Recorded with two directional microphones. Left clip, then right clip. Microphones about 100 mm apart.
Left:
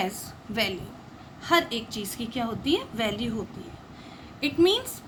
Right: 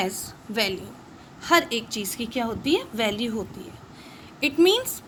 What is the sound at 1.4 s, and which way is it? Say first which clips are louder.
A woman's voice: right 3 dB; 50° right (ahead or behind).